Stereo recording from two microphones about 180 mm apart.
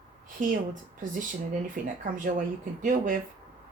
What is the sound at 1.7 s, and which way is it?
Speech, 50° right (ahead or behind).